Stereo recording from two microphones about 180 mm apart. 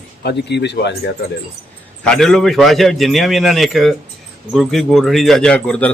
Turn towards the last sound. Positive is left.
turn(degrees=5)  # may be behind; listen again after turning